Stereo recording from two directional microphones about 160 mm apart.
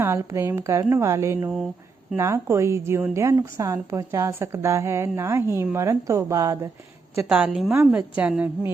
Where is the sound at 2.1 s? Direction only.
15° right (ahead or behind).